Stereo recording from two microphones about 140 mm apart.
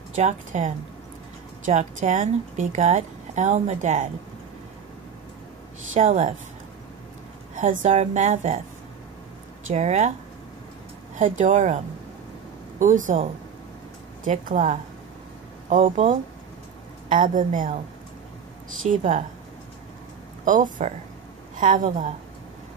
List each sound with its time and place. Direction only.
0.1 s speech: 55° right (ahead or behind)
5.9 s speech: 55° right (ahead or behind)
7.5 s speech: 60° right (ahead or behind)
9.7 s speech: 55° right (ahead or behind)
11.1 s a woman's voice: 65° right (ahead or behind)
14.2 s speech: 65° right (ahead or behind)
17.1 s a woman's voice: 70° right (ahead or behind)
18.9 s speech: 60° right (ahead or behind)
20.4 s a woman's voice: 70° right (ahead or behind)